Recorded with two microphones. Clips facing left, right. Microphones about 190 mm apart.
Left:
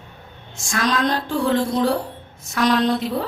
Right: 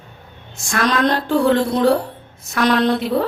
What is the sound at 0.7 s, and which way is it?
A woman's voice, 60° right (ahead or behind).